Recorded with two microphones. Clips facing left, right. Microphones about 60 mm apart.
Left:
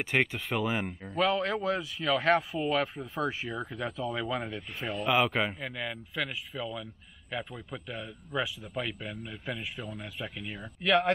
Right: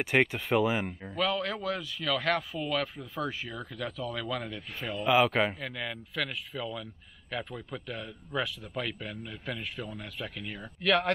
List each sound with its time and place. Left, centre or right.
0.0 s speech: centre
1.1 s a man's voice: left; by 4.9 s centre
4.9 s a man's voice: centre